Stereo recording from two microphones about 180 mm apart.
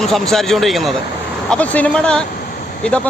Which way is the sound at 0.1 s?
Centre (ahead or behind).